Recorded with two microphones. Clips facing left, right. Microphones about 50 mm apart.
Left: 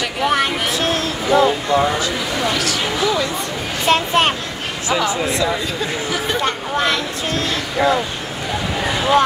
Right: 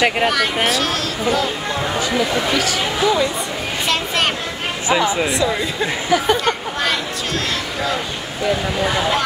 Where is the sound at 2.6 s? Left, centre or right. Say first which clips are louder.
Right 1 dB; centre.